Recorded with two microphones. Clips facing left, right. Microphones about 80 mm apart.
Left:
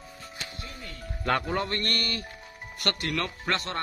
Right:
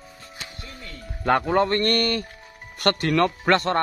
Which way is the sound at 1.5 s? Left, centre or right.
Right.